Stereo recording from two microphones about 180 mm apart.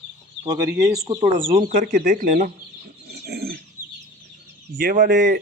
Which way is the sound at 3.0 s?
65° right (ahead or behind).